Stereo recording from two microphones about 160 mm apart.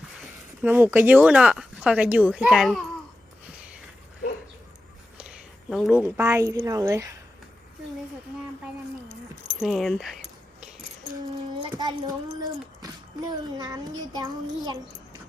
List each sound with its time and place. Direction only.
0.2 s speech: 10° right (ahead or behind)
5.1 s a sound: 5° right (ahead or behind)
5.9 s speech: 15° right (ahead or behind)
9.6 s speech: centre (ahead or behind)
11.8 s child singing: 25° right (ahead or behind)